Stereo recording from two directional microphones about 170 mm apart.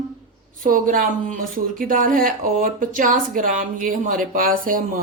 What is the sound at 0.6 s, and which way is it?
Speech, 55° right (ahead or behind).